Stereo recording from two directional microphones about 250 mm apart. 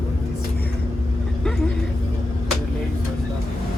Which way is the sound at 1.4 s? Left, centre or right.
Centre.